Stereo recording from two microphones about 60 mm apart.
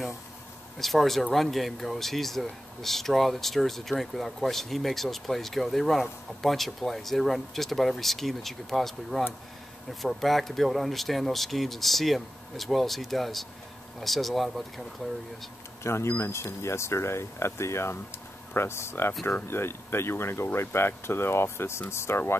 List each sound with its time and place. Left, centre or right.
0.7 s speech: centre
15.8 s speech: left